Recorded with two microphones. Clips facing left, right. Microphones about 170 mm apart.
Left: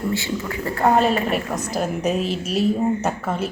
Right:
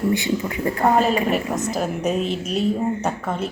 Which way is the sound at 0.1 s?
20° right (ahead or behind).